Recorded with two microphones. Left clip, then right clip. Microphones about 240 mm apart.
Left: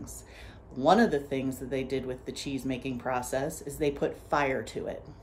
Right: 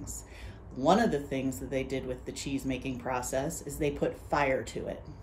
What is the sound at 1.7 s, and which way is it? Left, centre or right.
Speech, left.